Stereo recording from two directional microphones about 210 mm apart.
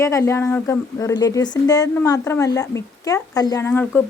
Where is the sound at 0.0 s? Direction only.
15° left (ahead or behind).